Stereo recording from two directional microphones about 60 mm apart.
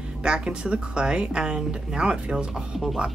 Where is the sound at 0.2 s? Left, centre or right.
Centre.